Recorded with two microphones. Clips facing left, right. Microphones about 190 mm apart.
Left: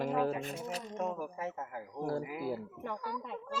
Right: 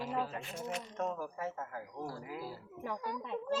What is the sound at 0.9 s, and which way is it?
Speech, 15° left (ahead or behind).